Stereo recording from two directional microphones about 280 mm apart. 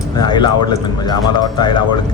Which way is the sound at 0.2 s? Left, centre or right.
Centre.